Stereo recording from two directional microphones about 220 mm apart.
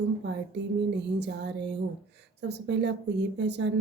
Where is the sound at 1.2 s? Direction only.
50° right (ahead or behind).